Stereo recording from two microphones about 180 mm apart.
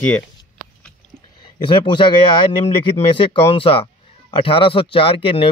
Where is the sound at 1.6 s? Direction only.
25° left (ahead or behind).